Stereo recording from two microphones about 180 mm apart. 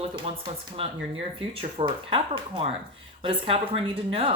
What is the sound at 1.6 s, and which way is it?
Speech, 30° right (ahead or behind).